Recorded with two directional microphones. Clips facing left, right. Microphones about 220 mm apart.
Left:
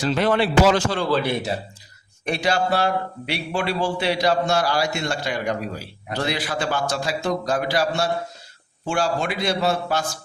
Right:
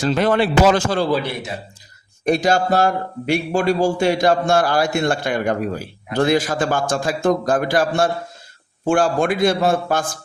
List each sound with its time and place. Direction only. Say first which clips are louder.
0.0 s a man's voice: right 3 dB; 45° right (ahead or behind)
2.2 s a man's voice: right 5 dB; 45° right (ahead or behind)